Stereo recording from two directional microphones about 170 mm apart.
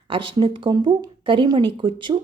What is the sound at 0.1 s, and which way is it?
A woman's voice, 30° right (ahead or behind).